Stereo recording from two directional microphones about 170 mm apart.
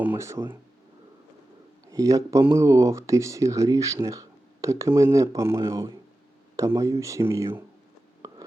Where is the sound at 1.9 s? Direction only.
20° right (ahead or behind).